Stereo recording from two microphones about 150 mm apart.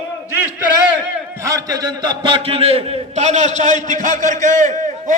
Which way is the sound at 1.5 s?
25° right (ahead or behind).